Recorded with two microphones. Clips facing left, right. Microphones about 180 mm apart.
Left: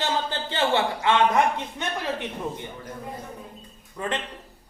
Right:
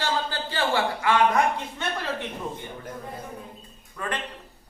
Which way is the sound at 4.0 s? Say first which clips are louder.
Left 2 dB; 20° left (ahead or behind).